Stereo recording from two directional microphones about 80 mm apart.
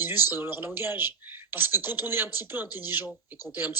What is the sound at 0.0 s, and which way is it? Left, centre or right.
Speech, right.